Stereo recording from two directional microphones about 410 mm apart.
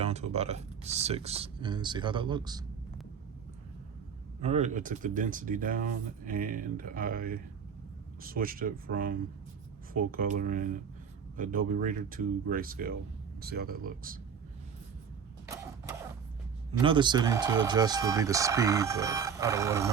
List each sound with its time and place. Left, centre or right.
0.0 s speech: centre
4.4 s speech: centre
15.4 s mechanisms: centre
16.7 s speech: centre